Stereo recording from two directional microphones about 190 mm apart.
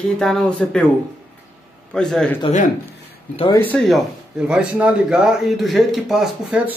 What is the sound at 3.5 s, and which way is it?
A man's voice, 10° left (ahead or behind).